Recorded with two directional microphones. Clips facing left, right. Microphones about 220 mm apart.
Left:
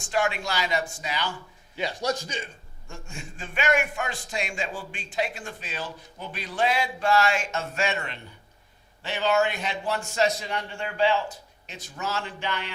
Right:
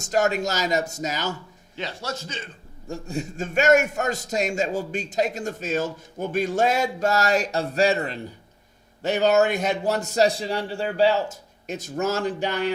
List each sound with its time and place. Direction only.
0.0 s a man's voice: 40° right (ahead or behind)
1.7 s speech: 15° left (ahead or behind)
2.8 s a man's voice: 35° right (ahead or behind)